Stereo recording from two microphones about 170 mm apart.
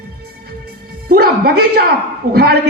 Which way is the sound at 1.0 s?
65° right (ahead or behind).